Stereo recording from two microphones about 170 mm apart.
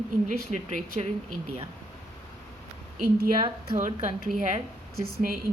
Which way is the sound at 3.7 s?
45° right (ahead or behind).